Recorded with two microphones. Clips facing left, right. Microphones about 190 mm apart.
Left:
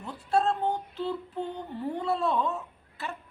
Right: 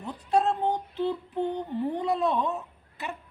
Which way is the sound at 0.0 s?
20° right (ahead or behind).